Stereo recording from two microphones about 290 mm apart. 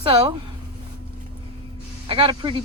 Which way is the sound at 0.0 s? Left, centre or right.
Centre.